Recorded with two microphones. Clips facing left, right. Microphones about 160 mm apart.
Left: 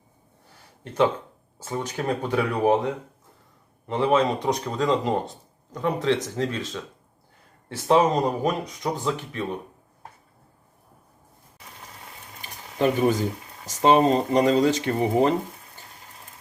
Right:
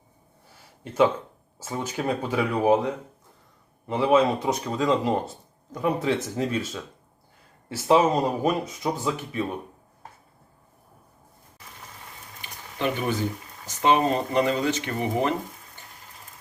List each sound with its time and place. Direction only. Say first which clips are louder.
1.5 s speech: left 1 dB; 5° right (ahead or behind)
12.8 s speech: left 5 dB; 35° left (ahead or behind)